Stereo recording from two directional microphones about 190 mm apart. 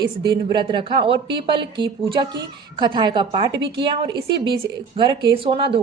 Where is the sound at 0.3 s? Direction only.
25° right (ahead or behind).